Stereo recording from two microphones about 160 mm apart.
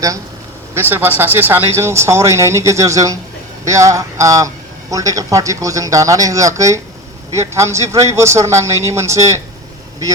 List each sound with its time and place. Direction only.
0.7 s a man's voice: 15° right (ahead or behind)